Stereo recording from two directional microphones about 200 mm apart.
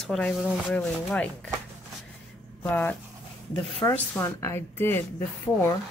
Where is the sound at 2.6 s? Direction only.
10° left (ahead or behind).